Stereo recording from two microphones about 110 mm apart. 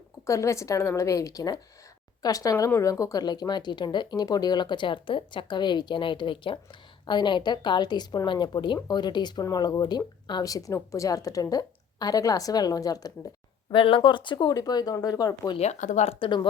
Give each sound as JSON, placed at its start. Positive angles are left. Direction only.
{"t": 0.3, "sound": "a woman's voice", "side_deg": 25}
{"t": 13.7, "sound": "speech", "side_deg": 55}
{"t": 15.5, "sound": "speech", "side_deg": 85}
{"t": 16.2, "sound": "a woman's voice", "side_deg": 50}